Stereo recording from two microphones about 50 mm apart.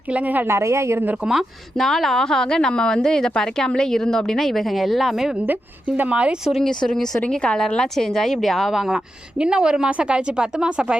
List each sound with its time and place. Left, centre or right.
0.1 s a woman's voice: right
0.4 s a woman's voice: right
1.8 s a woman's voice: centre
6.1 s speech: right
6.6 s a woman's voice: centre
9.4 s a woman's voice: centre